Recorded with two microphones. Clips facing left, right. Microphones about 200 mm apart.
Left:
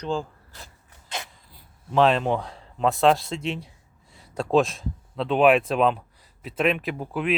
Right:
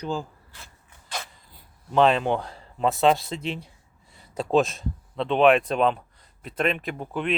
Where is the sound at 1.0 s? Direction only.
20° left (ahead or behind).